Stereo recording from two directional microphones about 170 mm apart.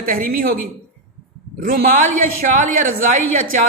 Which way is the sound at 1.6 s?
55° right (ahead or behind).